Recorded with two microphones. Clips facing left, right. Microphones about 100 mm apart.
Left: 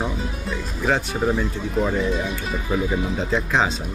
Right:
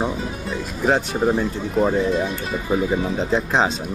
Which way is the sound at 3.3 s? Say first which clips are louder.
Right 2 dB; 30° right (ahead or behind).